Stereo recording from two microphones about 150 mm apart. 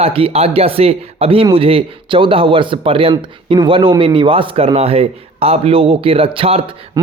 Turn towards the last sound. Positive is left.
turn(degrees=-40)  # may be behind; listen again after turning